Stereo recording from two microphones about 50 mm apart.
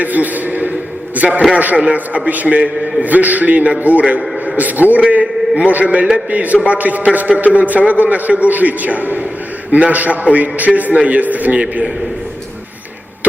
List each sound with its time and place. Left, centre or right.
0.0 s a man's voice: right